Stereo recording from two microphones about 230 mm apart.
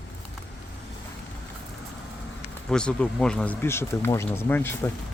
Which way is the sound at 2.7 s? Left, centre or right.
Centre.